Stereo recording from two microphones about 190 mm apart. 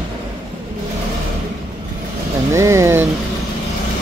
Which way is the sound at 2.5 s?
15° right (ahead or behind).